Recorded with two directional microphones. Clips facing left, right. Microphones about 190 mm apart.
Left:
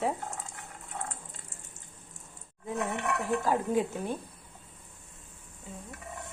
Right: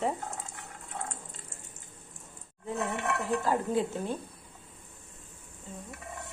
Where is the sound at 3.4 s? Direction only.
15° left (ahead or behind).